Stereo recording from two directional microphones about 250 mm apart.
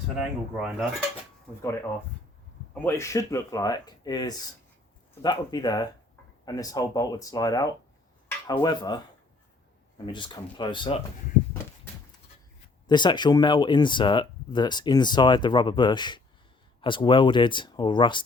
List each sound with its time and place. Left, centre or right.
0.2 s speech: centre
2.7 s speech: centre
10.1 s speech: centre
12.9 s speech: centre